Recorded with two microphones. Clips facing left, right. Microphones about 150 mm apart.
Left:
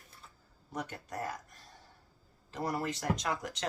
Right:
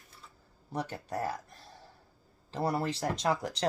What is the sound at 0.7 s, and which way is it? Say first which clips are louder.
Speech: right 5 dB; 30° right (ahead or behind).